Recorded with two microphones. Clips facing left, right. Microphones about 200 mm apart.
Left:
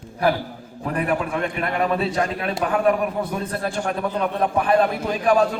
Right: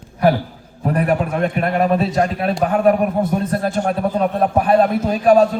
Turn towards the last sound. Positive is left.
turn(degrees=-40)  # may be behind; listen again after turning